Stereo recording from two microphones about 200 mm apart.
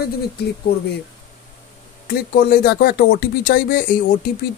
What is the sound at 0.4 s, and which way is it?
Speech, 55° left (ahead or behind).